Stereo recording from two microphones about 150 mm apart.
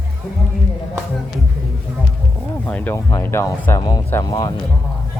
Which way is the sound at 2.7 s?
10° left (ahead or behind).